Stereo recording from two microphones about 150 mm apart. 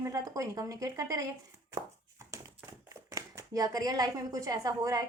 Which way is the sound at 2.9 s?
20° right (ahead or behind).